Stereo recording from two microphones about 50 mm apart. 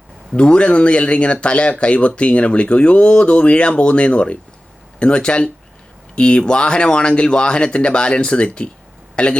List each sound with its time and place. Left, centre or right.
0.3 s speech: left